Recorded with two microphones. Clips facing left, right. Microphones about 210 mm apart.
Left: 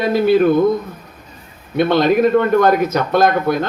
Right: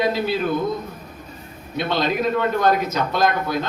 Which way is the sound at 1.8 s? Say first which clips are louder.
Left 9 dB; 55° left (ahead or behind).